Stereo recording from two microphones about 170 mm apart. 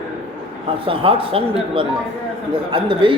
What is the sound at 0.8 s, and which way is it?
A man's voice, 30° right (ahead or behind).